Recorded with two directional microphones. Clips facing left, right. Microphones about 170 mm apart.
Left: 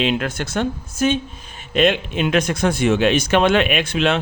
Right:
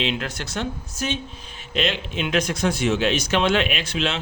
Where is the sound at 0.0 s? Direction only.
50° left (ahead or behind).